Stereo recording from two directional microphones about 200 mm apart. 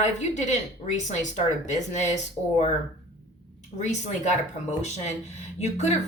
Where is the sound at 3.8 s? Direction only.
35° left (ahead or behind).